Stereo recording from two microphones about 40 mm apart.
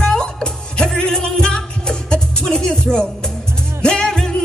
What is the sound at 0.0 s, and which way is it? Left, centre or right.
Music, centre.